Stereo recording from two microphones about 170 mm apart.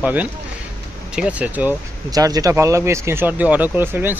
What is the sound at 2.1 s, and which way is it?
Speech, 20° right (ahead or behind).